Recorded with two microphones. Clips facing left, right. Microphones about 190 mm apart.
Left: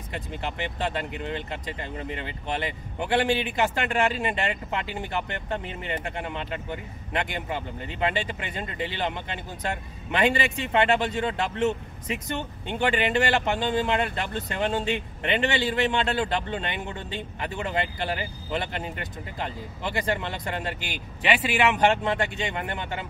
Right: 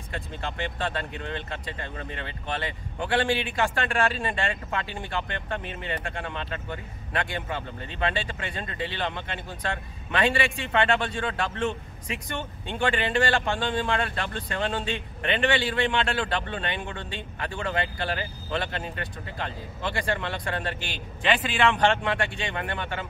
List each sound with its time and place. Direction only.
0.1 s speech: 15° left (ahead or behind)